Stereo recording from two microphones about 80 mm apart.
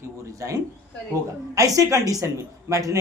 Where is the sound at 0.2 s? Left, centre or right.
Right.